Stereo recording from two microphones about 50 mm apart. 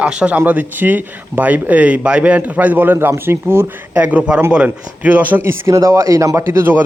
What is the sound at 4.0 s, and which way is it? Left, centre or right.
Speech, right.